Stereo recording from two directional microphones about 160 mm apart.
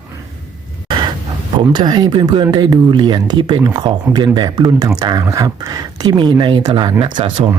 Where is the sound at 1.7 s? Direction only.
25° right (ahead or behind).